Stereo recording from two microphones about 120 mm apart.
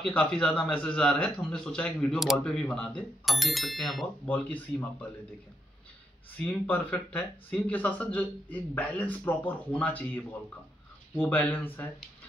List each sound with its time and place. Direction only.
0.0 s speech: 5° left (ahead or behind)
4.3 s speech: 10° left (ahead or behind)
6.3 s speech: 15° left (ahead or behind)